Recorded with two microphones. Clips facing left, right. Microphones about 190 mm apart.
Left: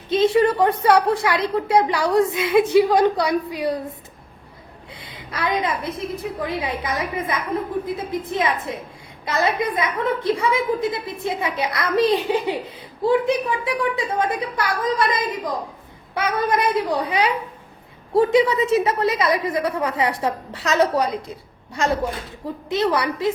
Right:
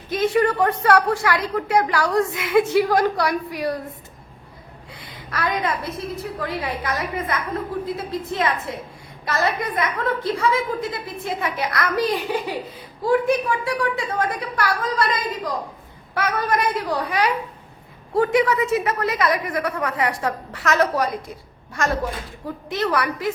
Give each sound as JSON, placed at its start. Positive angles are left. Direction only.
{"t": 0.1, "sound": "a woman's voice", "side_deg": 25}
{"t": 4.9, "sound": "a woman's voice", "side_deg": 20}
{"t": 22.4, "sound": "a woman's voice", "side_deg": 25}